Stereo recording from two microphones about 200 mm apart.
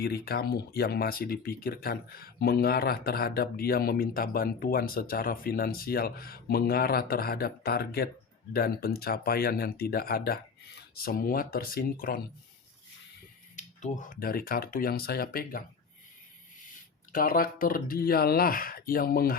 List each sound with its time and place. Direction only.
0.0 s speech: 50° left (ahead or behind)
13.6 s speech: 40° left (ahead or behind)
17.1 s speech: 45° left (ahead or behind)